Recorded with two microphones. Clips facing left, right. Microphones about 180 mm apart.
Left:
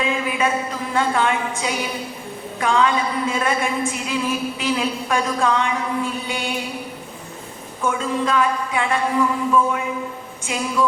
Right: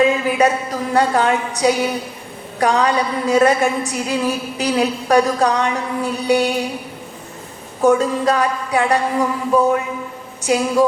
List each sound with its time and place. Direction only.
0.0 s a sound: 40° right (ahead or behind)
2.6 s a woman's voice: 40° right (ahead or behind)
7.8 s a woman's voice: 40° right (ahead or behind)